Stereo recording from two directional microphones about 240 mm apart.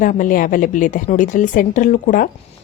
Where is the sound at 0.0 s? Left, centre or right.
Left.